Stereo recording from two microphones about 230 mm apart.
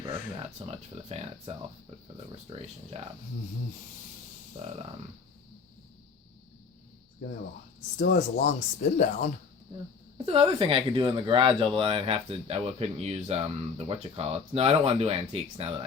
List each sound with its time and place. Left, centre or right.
0.0 s speech: right
8.1 s speech: left
10.2 s speech: right